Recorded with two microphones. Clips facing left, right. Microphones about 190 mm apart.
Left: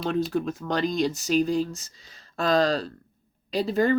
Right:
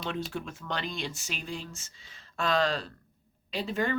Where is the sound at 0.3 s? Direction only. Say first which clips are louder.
Left 9 dB; 40° left (ahead or behind).